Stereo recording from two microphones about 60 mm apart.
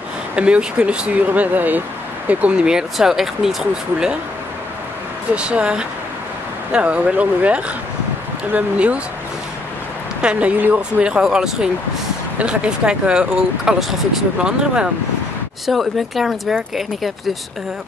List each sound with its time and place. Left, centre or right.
0.4 s speech: centre
2.2 s speech: centre
5.3 s speech: centre
10.2 s speech: centre
14.4 s speech: centre
15.6 s speech: centre